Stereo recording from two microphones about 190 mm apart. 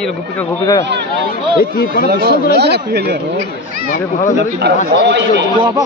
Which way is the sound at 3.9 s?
40° left (ahead or behind).